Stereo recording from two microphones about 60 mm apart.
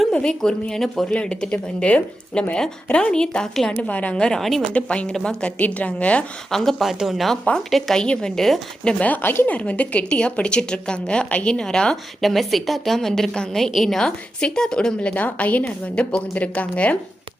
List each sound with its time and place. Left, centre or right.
0.1 s a woman's voice: centre
3.8 s a woman's voice: left; by 4.6 s centre
4.6 s a woman's voice: left
6.5 s a woman's voice: centre
9.0 s speech: left
9.6 s a woman's voice: left
15.1 s a woman's voice: left